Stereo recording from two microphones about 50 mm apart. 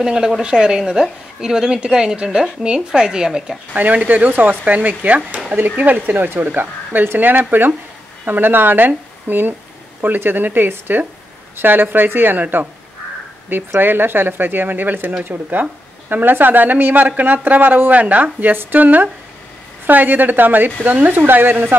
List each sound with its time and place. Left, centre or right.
0.0 s speech: centre
3.7 s a woman's voice: right
13.7 s a woman's voice: right